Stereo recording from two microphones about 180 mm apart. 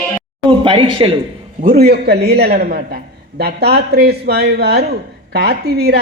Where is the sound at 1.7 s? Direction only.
60° right (ahead or behind).